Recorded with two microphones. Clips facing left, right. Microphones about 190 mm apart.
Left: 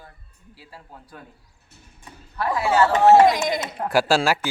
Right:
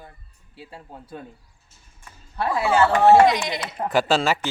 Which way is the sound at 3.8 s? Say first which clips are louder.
Left 1 dB; 10° left (ahead or behind).